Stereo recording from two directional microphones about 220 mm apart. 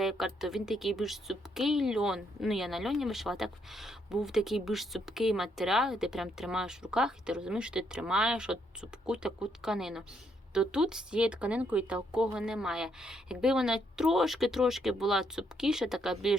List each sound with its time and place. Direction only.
0.0 s speech: centre (ahead or behind)